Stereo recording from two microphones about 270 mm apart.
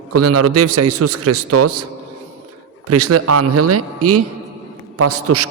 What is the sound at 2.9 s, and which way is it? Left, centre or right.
A man's voice, right.